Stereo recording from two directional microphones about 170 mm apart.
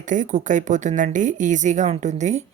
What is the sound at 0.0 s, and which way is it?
Speech, 50° right (ahead or behind).